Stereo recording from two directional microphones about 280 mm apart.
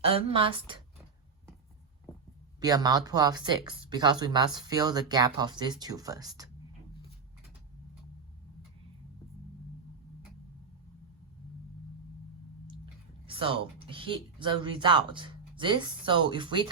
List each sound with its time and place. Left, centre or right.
0.0 s a woman's voice: centre
2.6 s speech: centre
12.6 s speech: centre